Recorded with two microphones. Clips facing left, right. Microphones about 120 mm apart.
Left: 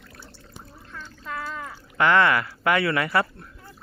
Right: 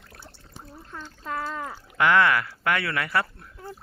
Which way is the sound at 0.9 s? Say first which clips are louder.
Right 2 dB; 30° right (ahead or behind).